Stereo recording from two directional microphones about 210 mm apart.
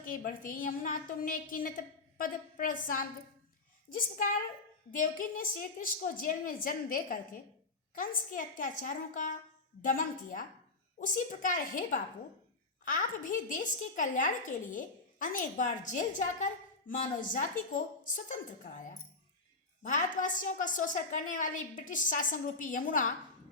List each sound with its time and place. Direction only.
0.0 s a woman's voice: 40° left (ahead or behind)